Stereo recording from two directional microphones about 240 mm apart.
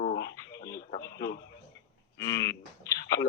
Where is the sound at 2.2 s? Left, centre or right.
Centre.